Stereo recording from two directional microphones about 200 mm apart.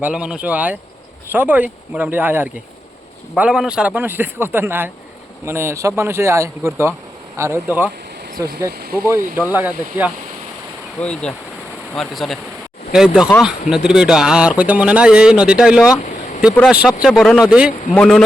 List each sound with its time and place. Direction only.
0.0 s a man's voice: 5° right (ahead or behind)
8.8 s speech: 50° right (ahead or behind)
9.0 s a man's voice: 15° right (ahead or behind)
11.0 s speech: 5° left (ahead or behind)
16.0 s vehicle: 35° left (ahead or behind)
16.8 s speech: centre (ahead or behind)